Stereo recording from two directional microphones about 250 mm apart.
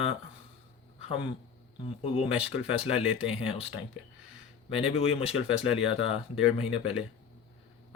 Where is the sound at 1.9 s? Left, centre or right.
Left.